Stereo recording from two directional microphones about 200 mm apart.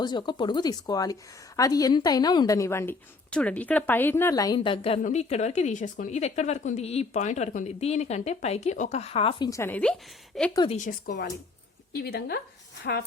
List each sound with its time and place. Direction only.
0.0 s a woman's voice: 20° left (ahead or behind)
9.5 s a woman's voice: 10° left (ahead or behind)
10.5 s speech: 20° left (ahead or behind)
10.8 s a woman's voice: 40° left (ahead or behind)